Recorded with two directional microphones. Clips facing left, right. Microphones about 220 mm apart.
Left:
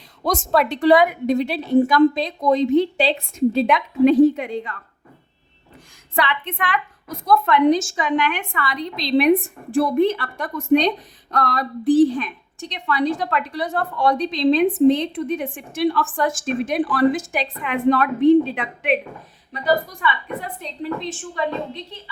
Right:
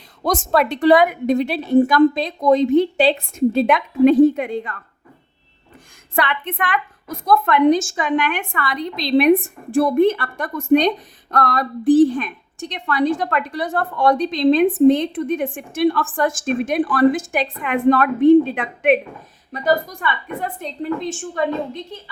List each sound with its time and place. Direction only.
0.3 s a woman's voice: 50° right (ahead or behind)
6.1 s a woman's voice: 50° right (ahead or behind)